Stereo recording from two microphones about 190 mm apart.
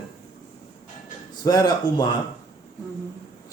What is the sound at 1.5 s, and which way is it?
Speech, 20° left (ahead or behind).